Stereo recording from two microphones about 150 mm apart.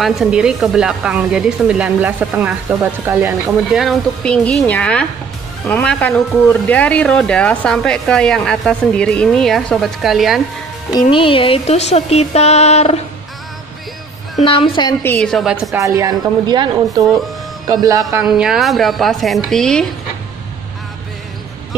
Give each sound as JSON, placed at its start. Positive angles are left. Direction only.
{"t": 0.0, "sound": "speech", "side_deg": -5}
{"t": 3.7, "sound": "a woman's voice", "side_deg": 0}
{"t": 10.9, "sound": "music", "side_deg": 30}
{"t": 14.4, "sound": "a woman's voice", "side_deg": 35}
{"t": 15.0, "sound": "speech", "side_deg": 5}
{"t": 15.8, "sound": "a woman's voice", "side_deg": -25}
{"t": 18.2, "sound": "speech", "side_deg": -5}